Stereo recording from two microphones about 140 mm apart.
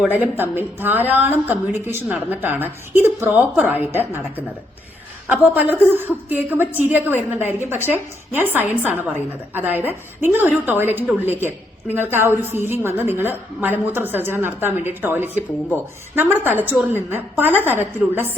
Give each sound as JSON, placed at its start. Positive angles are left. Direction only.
{"t": 0.0, "sound": "a woman's voice", "side_deg": -10}
{"t": 5.3, "sound": "a woman's voice", "side_deg": -10}